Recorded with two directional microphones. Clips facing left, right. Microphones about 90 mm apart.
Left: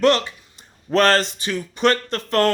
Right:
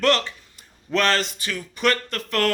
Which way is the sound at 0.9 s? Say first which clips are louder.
Left 5 dB; 40° left (ahead or behind).